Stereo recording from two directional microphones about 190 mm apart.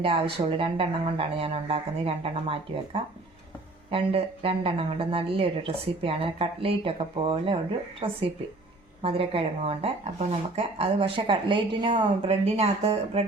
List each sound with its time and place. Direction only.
0.0 s speech: 30° right (ahead or behind)